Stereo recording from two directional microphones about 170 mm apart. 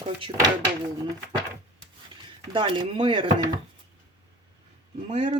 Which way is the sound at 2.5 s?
30° right (ahead or behind).